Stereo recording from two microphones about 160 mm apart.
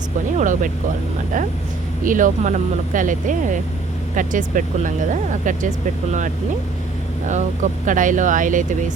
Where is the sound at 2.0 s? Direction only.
55° right (ahead or behind).